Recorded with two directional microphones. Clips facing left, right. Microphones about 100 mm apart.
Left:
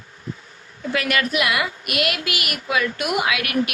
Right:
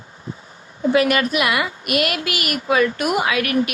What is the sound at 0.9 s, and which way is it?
A woman's voice, 40° right (ahead or behind).